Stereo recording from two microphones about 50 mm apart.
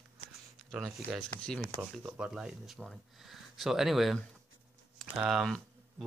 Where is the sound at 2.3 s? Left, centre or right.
Centre.